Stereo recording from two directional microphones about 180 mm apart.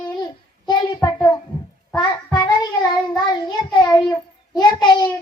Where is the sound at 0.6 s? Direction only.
25° left (ahead or behind).